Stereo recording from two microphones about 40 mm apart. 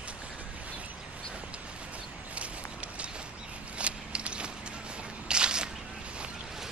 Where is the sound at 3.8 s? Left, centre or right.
Right.